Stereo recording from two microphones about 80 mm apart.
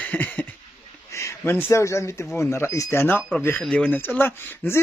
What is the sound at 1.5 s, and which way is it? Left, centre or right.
Speech, left.